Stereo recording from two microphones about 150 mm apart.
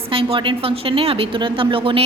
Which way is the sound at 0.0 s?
40° right (ahead or behind).